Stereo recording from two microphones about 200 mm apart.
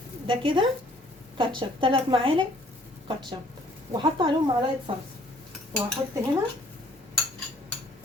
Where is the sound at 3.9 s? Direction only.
25° right (ahead or behind).